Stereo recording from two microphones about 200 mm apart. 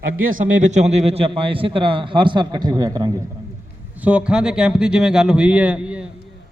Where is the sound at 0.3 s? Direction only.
40° right (ahead or behind); by 3.1 s 20° right (ahead or behind).